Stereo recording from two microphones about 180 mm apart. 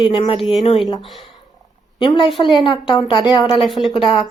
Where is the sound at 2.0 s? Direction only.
25° left (ahead or behind).